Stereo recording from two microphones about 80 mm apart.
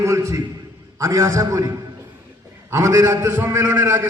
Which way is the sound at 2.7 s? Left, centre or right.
Right.